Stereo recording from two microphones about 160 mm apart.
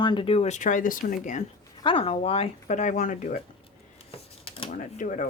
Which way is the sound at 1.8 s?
35° left (ahead or behind).